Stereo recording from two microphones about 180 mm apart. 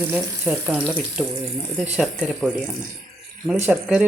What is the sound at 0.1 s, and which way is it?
A woman's voice, 10° right (ahead or behind).